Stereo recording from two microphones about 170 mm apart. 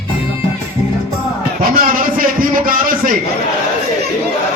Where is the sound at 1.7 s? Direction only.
55° right (ahead or behind).